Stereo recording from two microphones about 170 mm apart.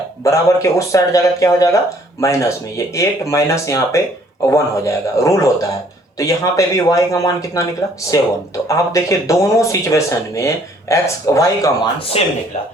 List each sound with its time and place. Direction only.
0.3 s speech: 20° left (ahead or behind)
11.9 s speech: 35° left (ahead or behind)